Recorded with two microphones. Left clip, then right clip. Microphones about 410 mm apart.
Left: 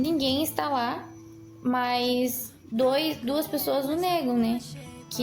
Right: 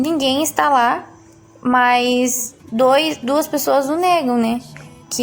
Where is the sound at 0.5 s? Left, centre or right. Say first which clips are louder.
Right 13 dB; left.